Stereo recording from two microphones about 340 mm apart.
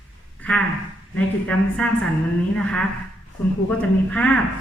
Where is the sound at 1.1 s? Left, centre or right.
Centre.